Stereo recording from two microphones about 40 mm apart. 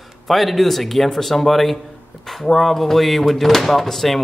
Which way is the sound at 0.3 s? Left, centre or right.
Centre.